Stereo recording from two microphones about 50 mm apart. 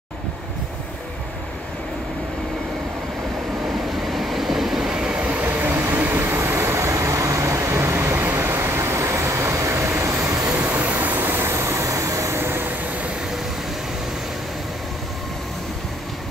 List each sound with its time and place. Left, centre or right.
4.1 s train: centre
5.1 s train: right
9.8 s vehicle: right
10.5 s vehicle: right
11.5 s vehicle: right
12.4 s vehicle: right